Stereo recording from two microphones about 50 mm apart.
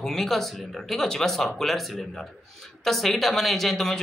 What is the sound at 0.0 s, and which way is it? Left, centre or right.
Speech, centre.